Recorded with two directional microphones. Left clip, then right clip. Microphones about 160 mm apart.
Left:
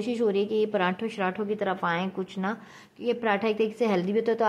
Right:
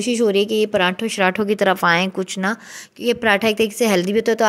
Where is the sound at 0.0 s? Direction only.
25° right (ahead or behind).